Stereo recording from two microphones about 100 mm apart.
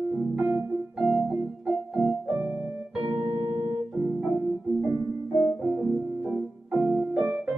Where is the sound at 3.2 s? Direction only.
70° right (ahead or behind).